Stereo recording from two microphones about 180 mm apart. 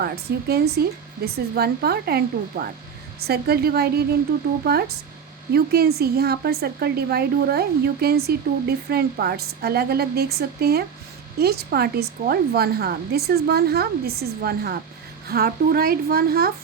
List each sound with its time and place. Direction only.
0.0 s a woman's voice: 60° right (ahead or behind)